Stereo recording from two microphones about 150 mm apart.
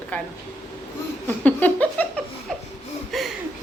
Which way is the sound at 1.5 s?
10° left (ahead or behind).